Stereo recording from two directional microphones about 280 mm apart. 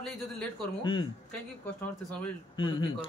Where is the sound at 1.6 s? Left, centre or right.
Centre.